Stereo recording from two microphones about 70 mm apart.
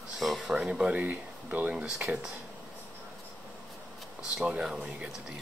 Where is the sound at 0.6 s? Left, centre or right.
Centre.